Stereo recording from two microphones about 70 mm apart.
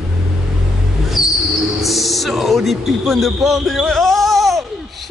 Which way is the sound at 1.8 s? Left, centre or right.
Centre.